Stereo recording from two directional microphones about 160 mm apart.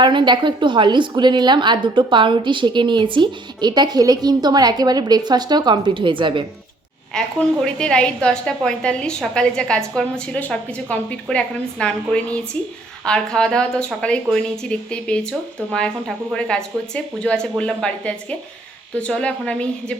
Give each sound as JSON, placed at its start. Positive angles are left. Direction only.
{"t": 0.0, "sound": "a woman's voice", "side_deg": -30}
{"t": 7.1, "sound": "a woman's voice", "side_deg": 5}